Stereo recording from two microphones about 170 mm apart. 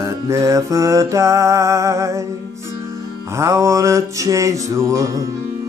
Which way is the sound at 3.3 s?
15° right (ahead or behind).